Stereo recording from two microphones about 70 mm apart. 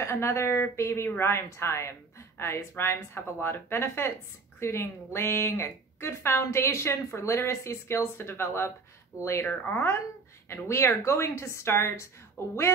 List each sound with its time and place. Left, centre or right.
0.0 s a woman's voice: left
10.5 s a woman's voice: left